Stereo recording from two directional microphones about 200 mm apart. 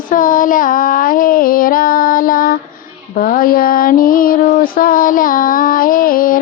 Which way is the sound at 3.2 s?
45° left (ahead or behind).